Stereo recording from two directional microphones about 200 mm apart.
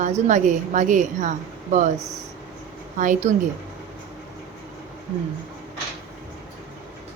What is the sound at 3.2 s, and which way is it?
Speech, 35° right (ahead or behind).